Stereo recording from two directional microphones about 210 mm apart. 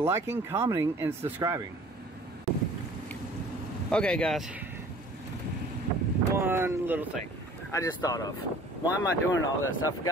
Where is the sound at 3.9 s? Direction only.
5° left (ahead or behind).